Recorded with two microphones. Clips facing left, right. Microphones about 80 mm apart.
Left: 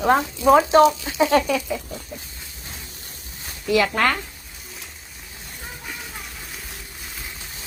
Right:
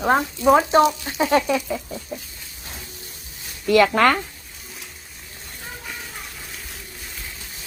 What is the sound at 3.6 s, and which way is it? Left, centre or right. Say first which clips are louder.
Speech: right 4 dB; right.